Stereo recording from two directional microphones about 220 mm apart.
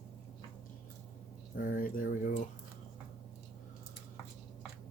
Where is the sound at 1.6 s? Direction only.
40° left (ahead or behind).